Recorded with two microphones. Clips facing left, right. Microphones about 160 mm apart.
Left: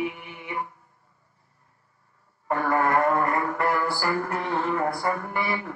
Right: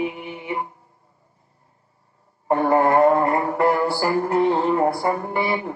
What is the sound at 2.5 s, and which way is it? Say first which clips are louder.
Mantra: right 6 dB; 25° right (ahead or behind).